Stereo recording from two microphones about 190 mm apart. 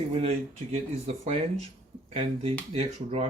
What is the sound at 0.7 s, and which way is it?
Speech, 35° right (ahead or behind).